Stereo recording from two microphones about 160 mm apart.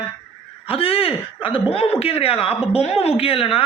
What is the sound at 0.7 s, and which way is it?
Speech, 35° left (ahead or behind).